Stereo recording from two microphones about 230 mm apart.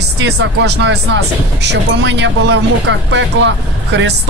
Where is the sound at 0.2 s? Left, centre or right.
Right.